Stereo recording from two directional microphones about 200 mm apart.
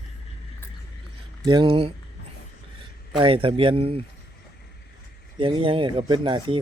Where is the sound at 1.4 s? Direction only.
25° right (ahead or behind).